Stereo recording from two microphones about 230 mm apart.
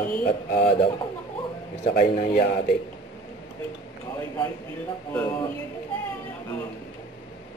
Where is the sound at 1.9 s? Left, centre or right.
Left.